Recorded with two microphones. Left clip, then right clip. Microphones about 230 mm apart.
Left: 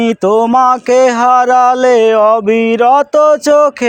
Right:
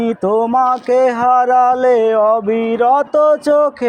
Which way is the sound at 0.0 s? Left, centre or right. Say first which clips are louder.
Left 5 dB; left.